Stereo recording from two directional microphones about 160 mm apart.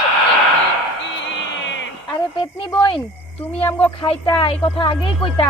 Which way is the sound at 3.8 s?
30° left (ahead or behind).